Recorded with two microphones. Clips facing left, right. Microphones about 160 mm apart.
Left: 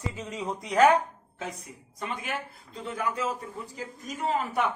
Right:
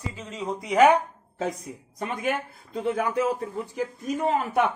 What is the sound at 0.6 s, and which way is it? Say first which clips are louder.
Speech: right 3 dB; 5° right (ahead or behind).